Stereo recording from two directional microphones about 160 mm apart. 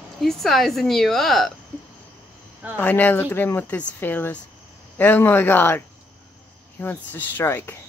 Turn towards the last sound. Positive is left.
turn(degrees=15)  # may be behind; listen again after turning